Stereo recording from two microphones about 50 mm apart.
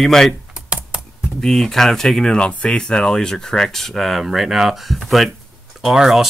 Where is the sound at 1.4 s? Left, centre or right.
Centre.